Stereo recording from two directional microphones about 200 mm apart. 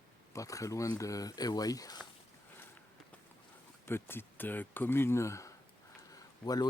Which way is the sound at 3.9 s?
10° left (ahead or behind).